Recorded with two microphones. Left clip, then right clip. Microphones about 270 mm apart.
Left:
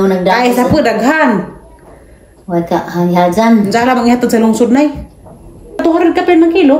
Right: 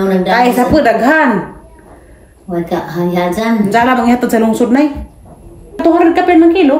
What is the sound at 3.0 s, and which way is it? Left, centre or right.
Speech, centre.